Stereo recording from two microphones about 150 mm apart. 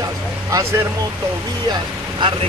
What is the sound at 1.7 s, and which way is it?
Speech, 30° right (ahead or behind).